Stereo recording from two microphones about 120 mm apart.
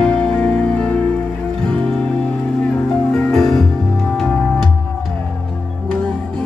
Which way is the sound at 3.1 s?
Centre (ahead or behind).